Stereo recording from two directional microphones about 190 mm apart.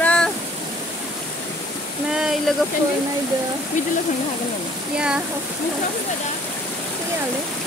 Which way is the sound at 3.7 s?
40° left (ahead or behind).